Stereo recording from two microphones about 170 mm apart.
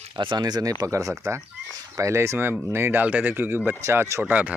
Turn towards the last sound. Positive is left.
turn(degrees=-10)  # may be behind; listen again after turning